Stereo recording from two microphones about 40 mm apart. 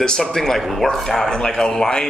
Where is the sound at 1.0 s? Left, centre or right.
Centre.